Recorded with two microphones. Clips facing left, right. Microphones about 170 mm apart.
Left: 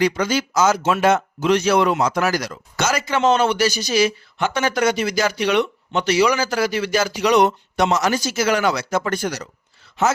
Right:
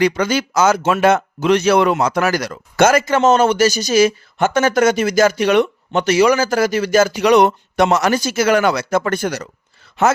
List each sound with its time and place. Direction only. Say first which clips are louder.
0.0 s speech: right 3 dB; 60° right (ahead or behind)